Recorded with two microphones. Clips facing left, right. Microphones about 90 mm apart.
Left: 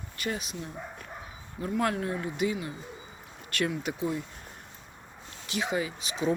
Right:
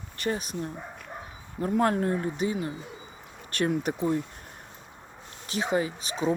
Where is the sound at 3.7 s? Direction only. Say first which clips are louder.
Right 5 dB; 40° right (ahead or behind).